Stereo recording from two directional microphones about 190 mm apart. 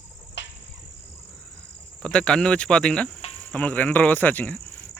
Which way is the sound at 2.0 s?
5° left (ahead or behind).